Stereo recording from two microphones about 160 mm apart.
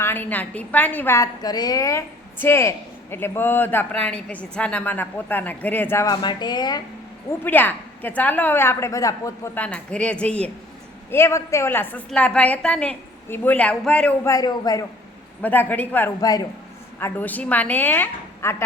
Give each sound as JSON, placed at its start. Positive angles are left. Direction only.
{"t": 0.0, "sound": "a woman's voice", "side_deg": 15}
{"t": 6.2, "sound": "speech", "side_deg": 25}
{"t": 7.4, "sound": "a woman's voice", "side_deg": 10}
{"t": 9.6, "sound": "a woman's voice", "side_deg": 5}
{"t": 14.3, "sound": "speech", "side_deg": 25}
{"t": 15.4, "sound": "a woman's voice", "side_deg": 10}
{"t": 16.2, "sound": "speech", "side_deg": 25}
{"t": 17.0, "sound": "a woman's voice", "side_deg": 10}